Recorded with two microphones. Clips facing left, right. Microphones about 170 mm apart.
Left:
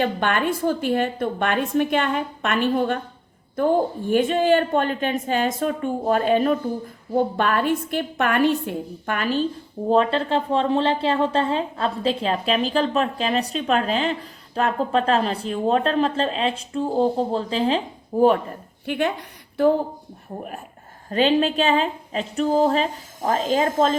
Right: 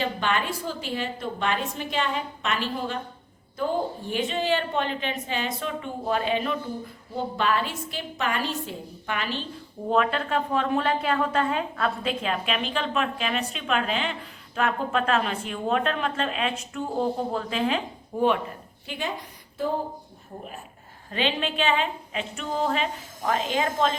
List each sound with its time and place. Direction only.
0.0 s a woman's voice: 55° left (ahead or behind)
9.9 s a woman's voice: 30° left (ahead or behind)
18.9 s a woman's voice: 60° left (ahead or behind)
21.1 s a woman's voice: 40° left (ahead or behind)